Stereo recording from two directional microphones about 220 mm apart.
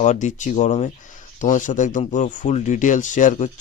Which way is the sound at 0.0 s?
35° left (ahead or behind).